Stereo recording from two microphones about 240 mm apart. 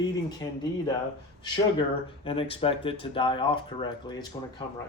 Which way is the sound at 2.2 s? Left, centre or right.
Left.